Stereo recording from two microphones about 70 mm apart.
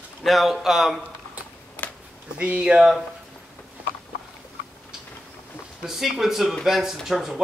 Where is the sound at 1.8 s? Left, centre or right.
Left.